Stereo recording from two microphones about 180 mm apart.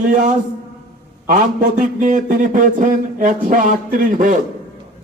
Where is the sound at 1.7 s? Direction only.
45° right (ahead or behind).